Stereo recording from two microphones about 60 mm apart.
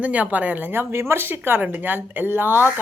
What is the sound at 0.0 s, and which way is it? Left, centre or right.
Speech, right.